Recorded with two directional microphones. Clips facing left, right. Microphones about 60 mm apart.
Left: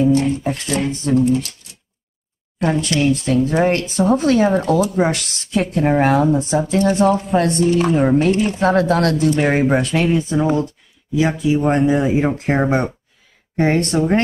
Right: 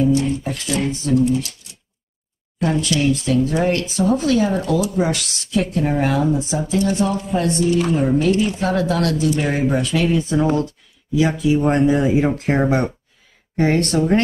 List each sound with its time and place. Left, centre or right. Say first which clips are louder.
0.0 s speech: left 2 dB; left
2.7 s speech: left 1 dB; left
10.0 s speech: left 1 dB; centre
11.5 s speech: left 1 dB; centre
13.9 s speech: even; left